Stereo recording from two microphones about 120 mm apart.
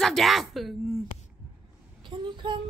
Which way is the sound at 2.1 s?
40° right (ahead or behind).